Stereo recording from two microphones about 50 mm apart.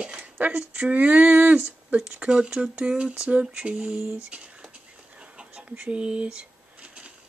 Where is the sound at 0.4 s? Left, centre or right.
Right.